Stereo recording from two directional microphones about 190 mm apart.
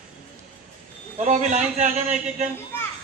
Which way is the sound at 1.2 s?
40° right (ahead or behind).